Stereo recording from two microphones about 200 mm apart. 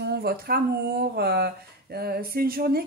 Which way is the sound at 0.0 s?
55° right (ahead or behind).